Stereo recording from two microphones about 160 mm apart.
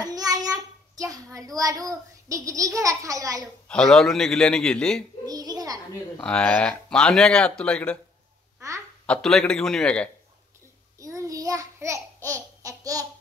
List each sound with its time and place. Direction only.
0.0 s child singing: 25° right (ahead or behind)
3.6 s a man's voice: 5° left (ahead or behind)
5.2 s a sound: 25° right (ahead or behind)
6.2 s speech: 10° left (ahead or behind)
8.5 s hiccup: 20° right (ahead or behind)
9.0 s a man's voice: 5° left (ahead or behind)
11.0 s babbling: 20° right (ahead or behind)